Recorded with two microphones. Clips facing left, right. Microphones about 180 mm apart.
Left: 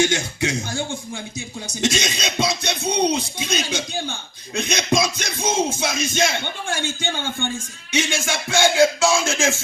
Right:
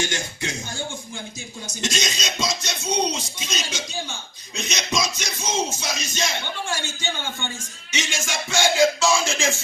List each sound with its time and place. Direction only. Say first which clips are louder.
0.0 s a man's voice: left 7 dB; 75° left (ahead or behind)
1.6 s speech: left 5 dB; 60° left (ahead or behind)